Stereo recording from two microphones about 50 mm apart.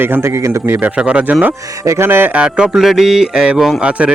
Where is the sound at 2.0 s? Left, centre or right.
Right.